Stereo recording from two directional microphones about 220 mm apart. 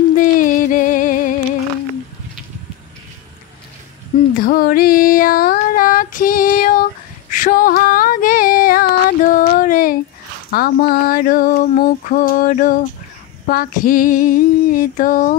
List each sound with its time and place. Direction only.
0.2 s music: 35° left (ahead or behind)
4.4 s female singing: 40° left (ahead or behind)
10.5 s a sound: 45° left (ahead or behind)
13.5 s female singing: 40° left (ahead or behind)